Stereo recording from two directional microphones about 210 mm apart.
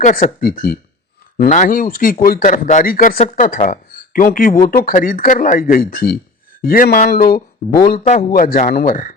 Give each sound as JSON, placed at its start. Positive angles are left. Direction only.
{"t": 0.0, "sound": "speech", "side_deg": 40}